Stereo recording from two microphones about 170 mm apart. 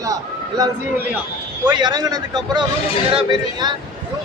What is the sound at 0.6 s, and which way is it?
A man's voice, 20° right (ahead or behind).